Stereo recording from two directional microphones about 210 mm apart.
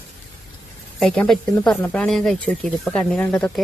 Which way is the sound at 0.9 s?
Centre (ahead or behind).